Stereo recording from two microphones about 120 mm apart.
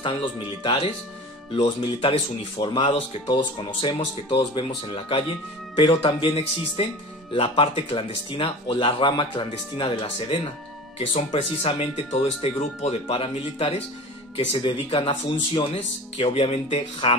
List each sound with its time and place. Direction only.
0.0 s speech: 40° left (ahead or behind)
11.1 s speech: 60° left (ahead or behind)
13.0 s speech: 50° left (ahead or behind)
14.6 s speech: 40° left (ahead or behind)